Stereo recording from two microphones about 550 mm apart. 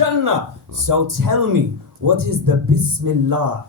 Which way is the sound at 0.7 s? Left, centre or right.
Right.